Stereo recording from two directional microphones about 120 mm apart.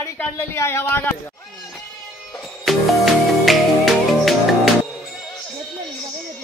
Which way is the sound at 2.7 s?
Centre (ahead or behind).